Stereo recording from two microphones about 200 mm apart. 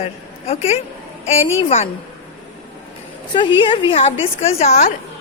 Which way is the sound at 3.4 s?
25° left (ahead or behind).